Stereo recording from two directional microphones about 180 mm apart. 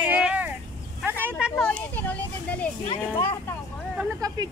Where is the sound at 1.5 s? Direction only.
10° left (ahead or behind).